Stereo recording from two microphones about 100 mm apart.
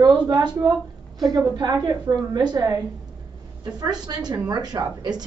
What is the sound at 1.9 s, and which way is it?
Speech, 40° right (ahead or behind).